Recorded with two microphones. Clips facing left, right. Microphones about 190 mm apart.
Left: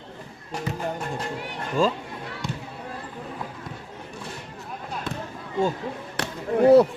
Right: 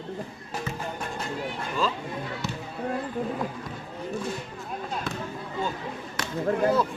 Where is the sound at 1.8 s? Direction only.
45° left (ahead or behind).